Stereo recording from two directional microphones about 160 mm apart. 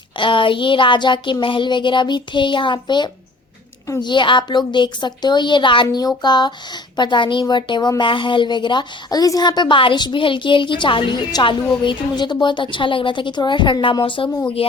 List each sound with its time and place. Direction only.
0.2 s a woman's voice: 30° left (ahead or behind)